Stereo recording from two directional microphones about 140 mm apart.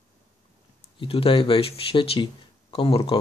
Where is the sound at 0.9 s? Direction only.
40° left (ahead or behind).